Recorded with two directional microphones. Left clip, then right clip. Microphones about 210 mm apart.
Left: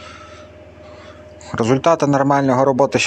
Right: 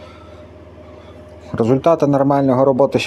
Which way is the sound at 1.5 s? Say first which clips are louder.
Right 1 dB; centre (ahead or behind).